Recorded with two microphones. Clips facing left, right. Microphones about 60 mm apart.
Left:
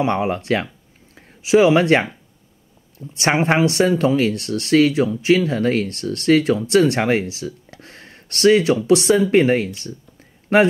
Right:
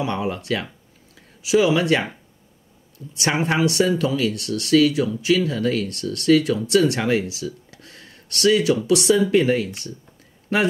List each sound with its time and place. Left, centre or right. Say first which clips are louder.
0.0 s speech: left 5 dB; left
3.2 s speech: left 4 dB; left